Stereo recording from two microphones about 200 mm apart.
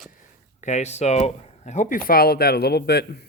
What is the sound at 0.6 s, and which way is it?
Speech, 35° left (ahead or behind).